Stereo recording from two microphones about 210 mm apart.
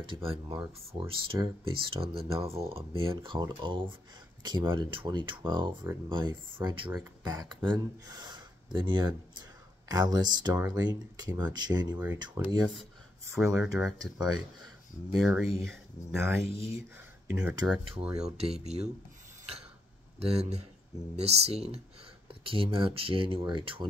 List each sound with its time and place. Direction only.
0.0 s speech: 25° right (ahead or behind)
13.6 s speech: 5° right (ahead or behind)
13.9 s speech: 20° right (ahead or behind)
15.1 s speech: centre (ahead or behind)
16.2 s speech: 10° right (ahead or behind)
18.4 s speech: 30° right (ahead or behind)
20.2 s speech: 30° right (ahead or behind)